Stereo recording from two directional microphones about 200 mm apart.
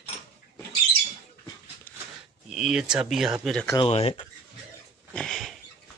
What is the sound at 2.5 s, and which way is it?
Speech, 5° right (ahead or behind).